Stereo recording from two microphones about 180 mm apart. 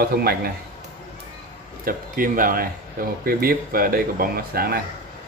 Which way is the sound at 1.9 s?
50° right (ahead or behind).